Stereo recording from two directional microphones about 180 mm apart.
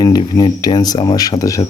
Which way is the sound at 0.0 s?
20° left (ahead or behind).